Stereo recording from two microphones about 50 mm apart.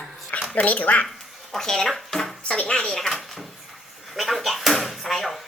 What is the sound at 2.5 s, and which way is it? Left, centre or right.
Speech, centre.